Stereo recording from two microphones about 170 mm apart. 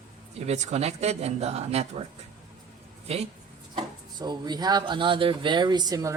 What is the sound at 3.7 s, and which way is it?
Speech, 25° right (ahead or behind).